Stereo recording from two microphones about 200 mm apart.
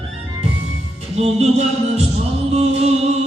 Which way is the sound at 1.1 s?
30° right (ahead or behind).